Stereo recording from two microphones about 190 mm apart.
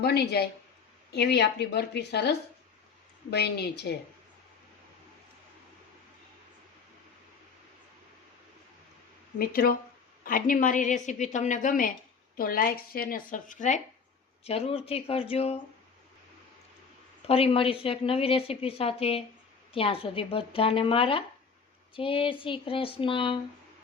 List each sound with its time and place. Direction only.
0.0 s a woman's voice: 60° left (ahead or behind)
9.4 s a woman's voice: 50° left (ahead or behind); by 15.5 s 30° left (ahead or behind)
17.2 s a woman's voice: 30° left (ahead or behind)